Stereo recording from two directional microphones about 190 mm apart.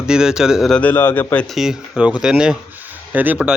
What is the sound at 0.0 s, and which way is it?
Speech, 5° right (ahead or behind).